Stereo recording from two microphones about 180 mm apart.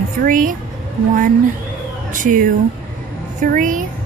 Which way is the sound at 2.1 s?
45° right (ahead or behind).